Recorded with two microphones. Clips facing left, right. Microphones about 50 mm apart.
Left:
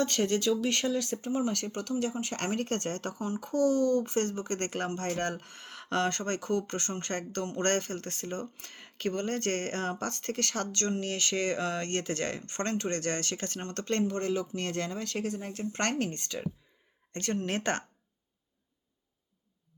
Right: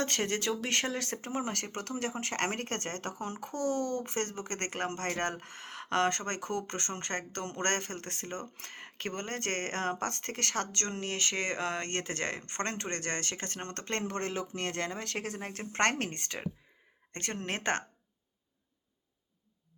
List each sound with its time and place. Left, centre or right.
0.0 s speech: right
4.9 s speech: right
5.1 s speech: right
14.1 s speech: right